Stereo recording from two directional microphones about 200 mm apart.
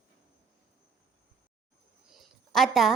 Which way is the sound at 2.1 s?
Centre (ahead or behind).